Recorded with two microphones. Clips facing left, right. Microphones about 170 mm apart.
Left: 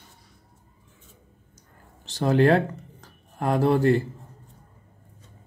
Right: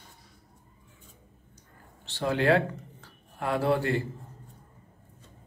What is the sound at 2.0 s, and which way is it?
Speech, 40° left (ahead or behind).